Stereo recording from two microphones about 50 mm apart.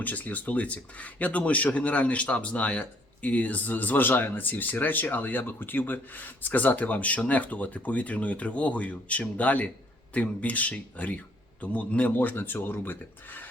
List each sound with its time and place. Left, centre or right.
0.0 s a man's voice: left
12.1 s speech: left